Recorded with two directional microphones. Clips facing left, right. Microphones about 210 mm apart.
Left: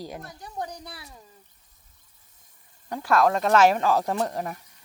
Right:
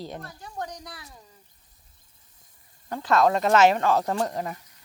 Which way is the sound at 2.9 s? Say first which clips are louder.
Even; 10° left (ahead or behind).